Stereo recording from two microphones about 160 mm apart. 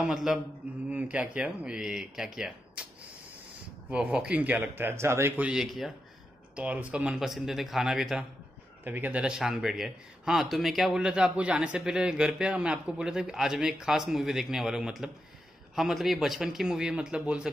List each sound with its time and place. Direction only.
0.0 s speech: 5° right (ahead or behind)
3.9 s speech: 5° right (ahead or behind)